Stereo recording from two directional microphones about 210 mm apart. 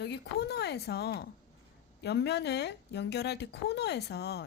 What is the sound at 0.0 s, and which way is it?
Speech, 50° left (ahead or behind).